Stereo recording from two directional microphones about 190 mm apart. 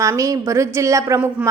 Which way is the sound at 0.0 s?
15° right (ahead or behind).